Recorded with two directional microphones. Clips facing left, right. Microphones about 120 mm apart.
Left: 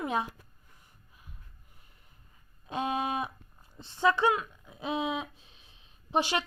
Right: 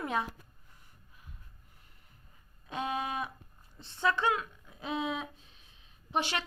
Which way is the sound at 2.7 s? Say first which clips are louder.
Left 3 dB; 25° left (ahead or behind).